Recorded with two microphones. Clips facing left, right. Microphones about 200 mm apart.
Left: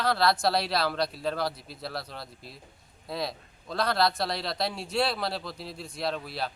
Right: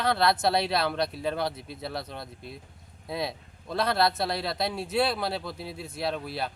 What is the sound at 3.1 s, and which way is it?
Speech, centre (ahead or behind).